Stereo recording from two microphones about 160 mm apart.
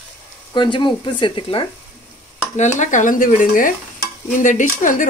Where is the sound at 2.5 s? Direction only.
45° left (ahead or behind).